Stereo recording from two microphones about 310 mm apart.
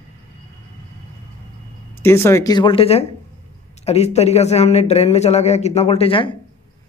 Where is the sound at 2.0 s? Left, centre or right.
Centre.